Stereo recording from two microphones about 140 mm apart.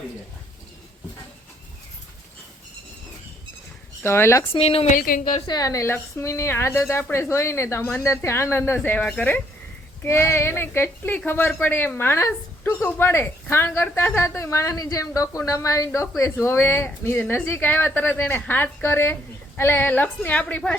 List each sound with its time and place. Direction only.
4.0 s speech: 15° left (ahead or behind)
4.5 s a woman's voice: 45° left (ahead or behind)
4.9 s a woman's voice: 80° left
5.5 s a woman's voice: 25° left (ahead or behind); by 20.7 s 10° left (ahead or behind)